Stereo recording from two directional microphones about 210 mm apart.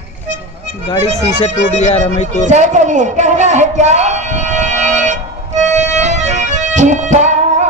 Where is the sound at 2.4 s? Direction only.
35° right (ahead or behind).